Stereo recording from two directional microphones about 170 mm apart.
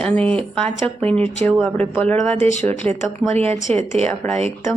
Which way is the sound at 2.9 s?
40° right (ahead or behind).